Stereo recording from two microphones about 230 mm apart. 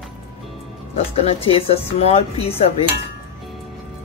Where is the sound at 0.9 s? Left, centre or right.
Left.